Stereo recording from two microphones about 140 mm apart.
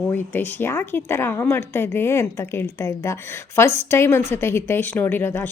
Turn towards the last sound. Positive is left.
turn(degrees=15)  # may be behind; listen again after turning